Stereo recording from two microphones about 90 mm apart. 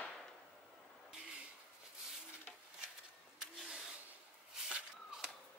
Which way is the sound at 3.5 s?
5° right (ahead or behind).